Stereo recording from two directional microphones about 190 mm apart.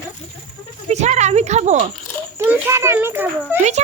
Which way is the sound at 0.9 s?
35° right (ahead or behind).